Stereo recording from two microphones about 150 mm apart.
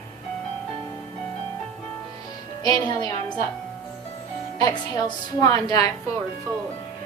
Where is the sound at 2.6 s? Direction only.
25° left (ahead or behind).